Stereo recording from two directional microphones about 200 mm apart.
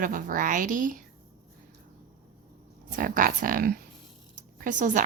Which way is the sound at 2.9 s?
45° right (ahead or behind).